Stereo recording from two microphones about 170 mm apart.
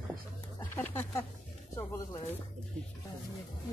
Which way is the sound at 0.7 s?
15° left (ahead or behind).